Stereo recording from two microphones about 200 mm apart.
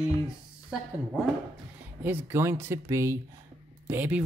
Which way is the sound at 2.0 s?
10° right (ahead or behind).